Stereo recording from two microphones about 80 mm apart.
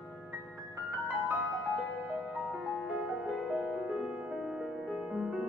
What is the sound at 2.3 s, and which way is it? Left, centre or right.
Music, centre.